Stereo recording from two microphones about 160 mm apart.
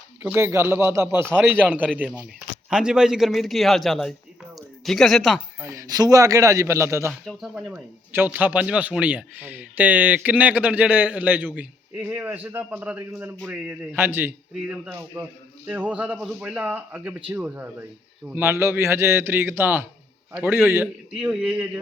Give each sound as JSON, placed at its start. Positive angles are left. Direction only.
{"t": 0.2, "sound": "a man's voice", "side_deg": -15}
{"t": 5.5, "sound": "a man's voice", "side_deg": -20}
{"t": 7.1, "sound": "speech", "side_deg": 0}
{"t": 15.1, "sound": "a man's voice", "side_deg": -25}
{"t": 15.6, "sound": "a man's voice", "side_deg": -10}